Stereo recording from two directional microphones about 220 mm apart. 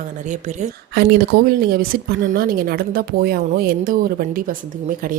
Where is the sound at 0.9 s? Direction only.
45° right (ahead or behind).